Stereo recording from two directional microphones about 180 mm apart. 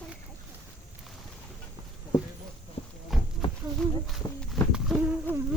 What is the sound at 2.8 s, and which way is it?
Hum, 35° left (ahead or behind).